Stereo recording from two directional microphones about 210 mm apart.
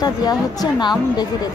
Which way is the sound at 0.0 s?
20° left (ahead or behind).